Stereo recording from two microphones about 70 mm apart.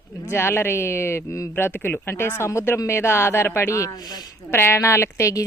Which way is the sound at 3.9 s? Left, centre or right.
Left.